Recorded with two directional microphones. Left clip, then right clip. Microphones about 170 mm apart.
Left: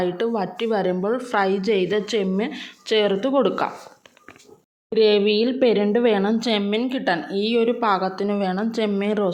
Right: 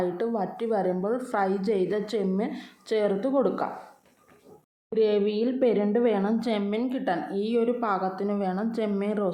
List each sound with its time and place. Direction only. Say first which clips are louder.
0.0 s a woman's voice: left 5 dB; 25° left (ahead or behind)
4.9 s a woman's voice: left 7 dB; 30° left (ahead or behind)